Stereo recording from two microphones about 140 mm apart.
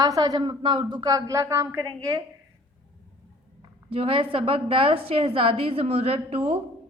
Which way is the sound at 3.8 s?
40° right (ahead or behind).